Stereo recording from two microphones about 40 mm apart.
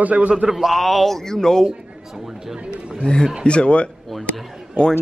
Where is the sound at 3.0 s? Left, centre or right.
Left.